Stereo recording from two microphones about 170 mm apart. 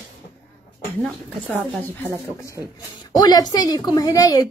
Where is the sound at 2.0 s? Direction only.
10° left (ahead or behind).